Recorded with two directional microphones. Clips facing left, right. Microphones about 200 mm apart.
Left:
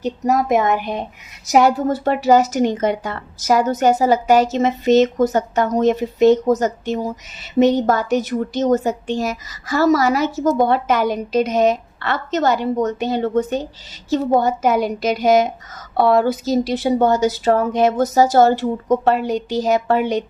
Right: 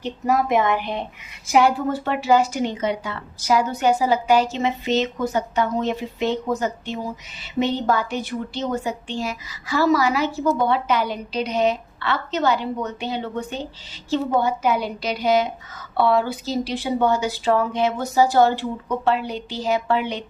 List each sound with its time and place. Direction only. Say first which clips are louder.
0.0 s a woman's voice: left 3 dB; 40° left (ahead or behind)